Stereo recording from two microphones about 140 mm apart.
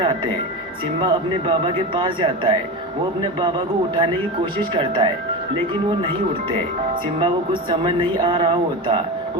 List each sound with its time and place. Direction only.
1.0 s speech: 35° right (ahead or behind)
4.8 s speech: 35° right (ahead or behind)
7.2 s speech: 40° right (ahead or behind)